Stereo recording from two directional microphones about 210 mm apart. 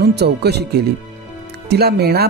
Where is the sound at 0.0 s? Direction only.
50° right (ahead or behind).